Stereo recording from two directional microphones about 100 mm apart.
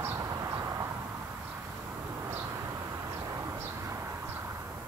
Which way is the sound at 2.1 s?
25° right (ahead or behind).